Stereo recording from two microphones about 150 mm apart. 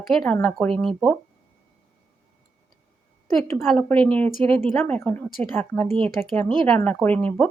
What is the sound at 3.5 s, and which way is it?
Speech, centre (ahead or behind).